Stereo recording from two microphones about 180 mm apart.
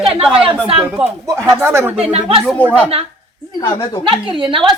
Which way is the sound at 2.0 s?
35° right (ahead or behind).